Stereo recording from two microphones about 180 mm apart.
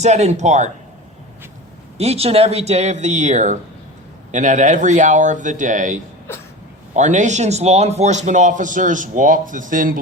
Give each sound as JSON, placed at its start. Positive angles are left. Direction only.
{"t": 0.0, "sound": "speech", "side_deg": -40}
{"t": 2.0, "sound": "a man's voice", "side_deg": -35}